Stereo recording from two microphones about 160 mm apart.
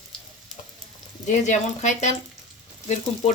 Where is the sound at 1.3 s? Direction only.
50° left (ahead or behind).